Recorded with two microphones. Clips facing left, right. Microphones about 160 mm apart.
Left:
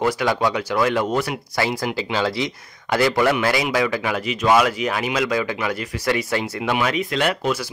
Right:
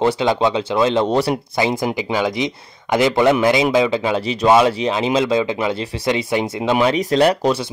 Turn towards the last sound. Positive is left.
turn(degrees=-35)  # may be behind; listen again after turning